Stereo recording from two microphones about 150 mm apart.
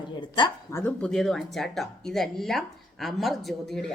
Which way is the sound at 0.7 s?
10° left (ahead or behind).